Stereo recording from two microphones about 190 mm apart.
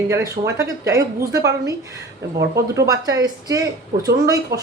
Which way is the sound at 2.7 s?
20° right (ahead or behind).